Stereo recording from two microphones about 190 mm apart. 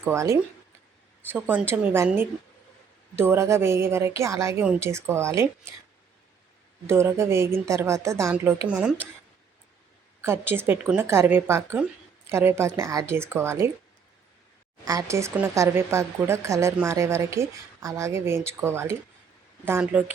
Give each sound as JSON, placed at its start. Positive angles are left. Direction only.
{"t": 0.0, "sound": "speech", "side_deg": -15}
{"t": 6.8, "sound": "speech", "side_deg": -15}
{"t": 10.2, "sound": "speech", "side_deg": -10}
{"t": 14.8, "sound": "speech", "side_deg": -15}